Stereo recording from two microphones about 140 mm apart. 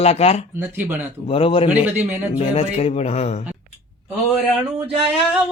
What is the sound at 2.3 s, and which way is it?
Speech, 45° left (ahead or behind).